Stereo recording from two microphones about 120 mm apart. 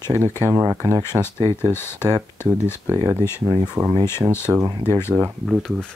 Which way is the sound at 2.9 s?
25° right (ahead or behind).